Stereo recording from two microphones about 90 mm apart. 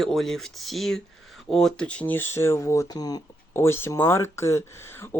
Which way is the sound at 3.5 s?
30° left (ahead or behind).